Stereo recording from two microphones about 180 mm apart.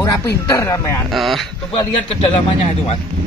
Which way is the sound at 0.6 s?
15° left (ahead or behind).